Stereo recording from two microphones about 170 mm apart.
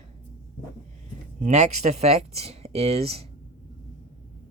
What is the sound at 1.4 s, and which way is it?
Speech, 40° right (ahead or behind).